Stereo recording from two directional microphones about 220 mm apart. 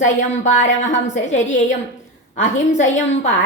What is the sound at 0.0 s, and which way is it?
A woman's voice, 35° left (ahead or behind).